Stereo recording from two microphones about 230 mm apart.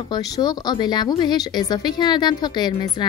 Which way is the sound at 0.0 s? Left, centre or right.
Centre.